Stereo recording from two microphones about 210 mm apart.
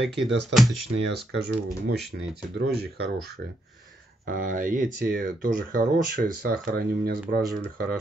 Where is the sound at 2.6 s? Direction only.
50° right (ahead or behind).